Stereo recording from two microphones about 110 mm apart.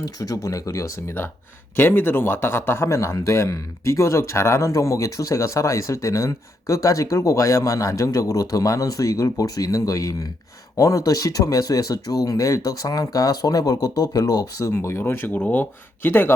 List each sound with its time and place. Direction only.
0.0 s speech: 35° left (ahead or behind)
1.7 s speech: 20° left (ahead or behind); by 14.7 s 35° left (ahead or behind)
14.8 s speech: 25° left (ahead or behind)